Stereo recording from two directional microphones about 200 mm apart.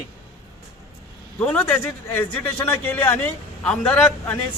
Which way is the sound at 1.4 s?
10° left (ahead or behind).